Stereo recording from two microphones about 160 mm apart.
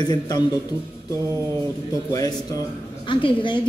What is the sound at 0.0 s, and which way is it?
Speech, 25° left (ahead or behind).